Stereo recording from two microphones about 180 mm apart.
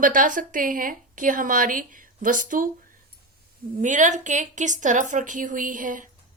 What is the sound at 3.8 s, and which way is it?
A woman's voice, 45° right (ahead or behind).